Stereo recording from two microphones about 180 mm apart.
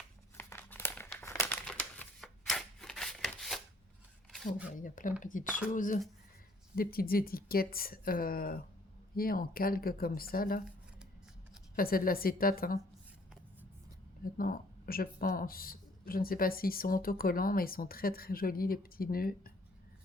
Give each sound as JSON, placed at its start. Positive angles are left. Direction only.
{"t": 0.3, "sound": "crumpling", "side_deg": 15}
{"t": 1.6, "sound": "typewriter", "side_deg": 0}
{"t": 4.8, "sound": "speech", "side_deg": 45}
{"t": 11.8, "sound": "speech", "side_deg": 55}
{"t": 14.3, "sound": "speech", "side_deg": 55}